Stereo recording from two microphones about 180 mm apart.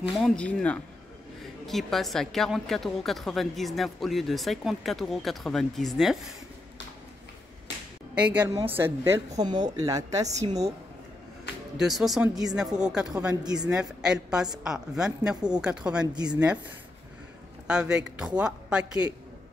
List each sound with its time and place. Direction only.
0.2 s a woman's voice: 5° left (ahead or behind)
8.1 s a woman's voice: 10° right (ahead or behind)
11.7 s a woman's voice: centre (ahead or behind)
17.6 s a woman's voice: 5° right (ahead or behind)